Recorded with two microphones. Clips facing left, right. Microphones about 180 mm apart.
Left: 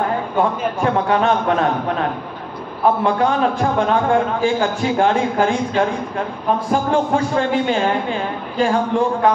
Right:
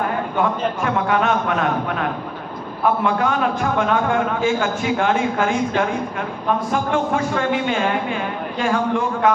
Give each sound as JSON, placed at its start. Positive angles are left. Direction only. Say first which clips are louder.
{"t": 0.4, "sound": "a man's voice", "louder": "left 2 dB", "side_deg": 30}
{"t": 3.2, "sound": "a man's voice", "louder": "left 3 dB", "side_deg": 30}
{"t": 6.7, "sound": "a man's voice", "louder": "left 5 dB", "side_deg": 30}